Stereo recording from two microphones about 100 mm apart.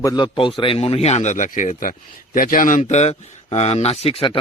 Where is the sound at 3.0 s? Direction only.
90° left; by 4.3 s 60° left (ahead or behind).